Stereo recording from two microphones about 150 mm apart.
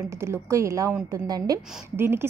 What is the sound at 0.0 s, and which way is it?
A woman's voice, 20° right (ahead or behind).